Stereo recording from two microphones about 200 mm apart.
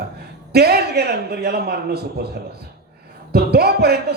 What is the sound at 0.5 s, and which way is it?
A man's voice, 55° right (ahead or behind).